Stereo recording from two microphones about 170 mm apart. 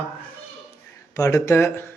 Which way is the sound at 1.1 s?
20° left (ahead or behind).